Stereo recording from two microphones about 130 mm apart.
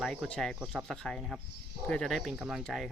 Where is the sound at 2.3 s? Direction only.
10° right (ahead or behind).